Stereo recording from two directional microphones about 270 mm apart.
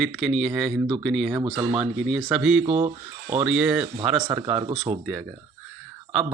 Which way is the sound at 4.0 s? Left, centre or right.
Centre.